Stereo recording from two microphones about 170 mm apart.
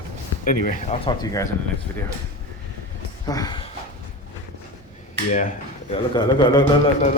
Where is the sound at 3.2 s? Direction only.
20° left (ahead or behind).